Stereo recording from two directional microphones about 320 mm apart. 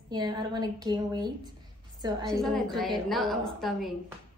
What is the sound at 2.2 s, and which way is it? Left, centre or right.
Speech, centre.